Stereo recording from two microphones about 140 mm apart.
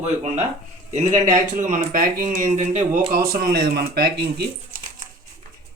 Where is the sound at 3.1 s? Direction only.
90° right.